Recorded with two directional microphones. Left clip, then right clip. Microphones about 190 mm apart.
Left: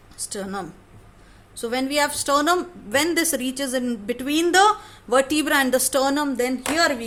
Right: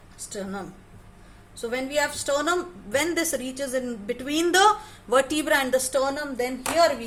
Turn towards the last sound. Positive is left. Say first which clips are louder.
# even
turn(degrees=50)  # may be behind; listen again after turning